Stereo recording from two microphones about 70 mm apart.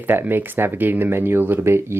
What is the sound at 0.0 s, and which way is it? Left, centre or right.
Speech, right.